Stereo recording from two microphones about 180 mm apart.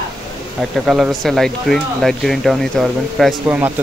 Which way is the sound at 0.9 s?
Centre (ahead or behind).